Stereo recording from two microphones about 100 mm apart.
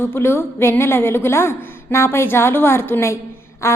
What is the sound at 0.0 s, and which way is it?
A woman's voice, 25° left (ahead or behind).